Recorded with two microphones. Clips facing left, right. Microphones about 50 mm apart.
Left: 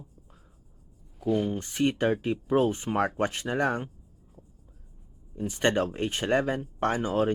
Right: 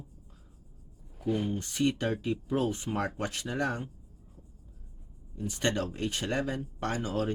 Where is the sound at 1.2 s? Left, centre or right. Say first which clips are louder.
Left 4 dB; centre.